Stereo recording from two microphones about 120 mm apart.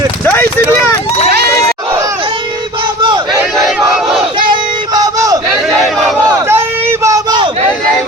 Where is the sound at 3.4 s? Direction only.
5° right (ahead or behind).